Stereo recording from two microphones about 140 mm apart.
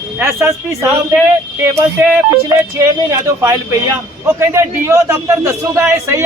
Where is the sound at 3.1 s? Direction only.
20° right (ahead or behind).